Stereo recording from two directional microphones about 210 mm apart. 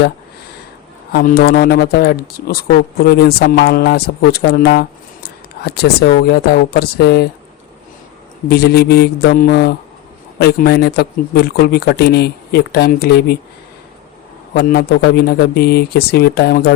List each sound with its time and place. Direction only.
1.1 s speech: 45° left (ahead or behind)
8.4 s speech: 50° left (ahead or behind)
14.5 s speech: 50° left (ahead or behind)